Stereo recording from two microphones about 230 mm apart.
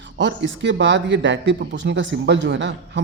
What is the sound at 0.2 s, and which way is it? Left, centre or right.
Speech, right.